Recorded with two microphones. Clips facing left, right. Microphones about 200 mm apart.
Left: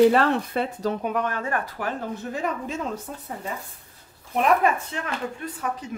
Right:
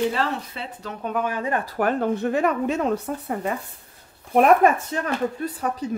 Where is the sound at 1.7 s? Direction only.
60° right (ahead or behind).